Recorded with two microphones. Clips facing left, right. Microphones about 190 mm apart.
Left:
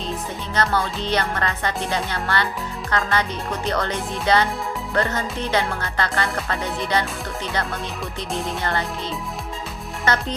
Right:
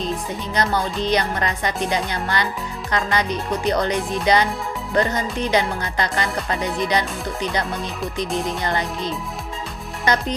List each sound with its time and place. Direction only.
0.5 s music: 15° right (ahead or behind)
8.4 s music: 15° right (ahead or behind)